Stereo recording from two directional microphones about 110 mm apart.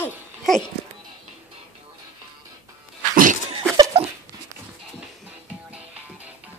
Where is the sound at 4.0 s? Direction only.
65° right (ahead or behind).